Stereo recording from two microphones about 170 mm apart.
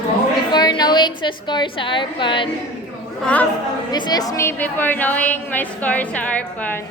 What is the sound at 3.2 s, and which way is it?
Speech, 10° left (ahead or behind).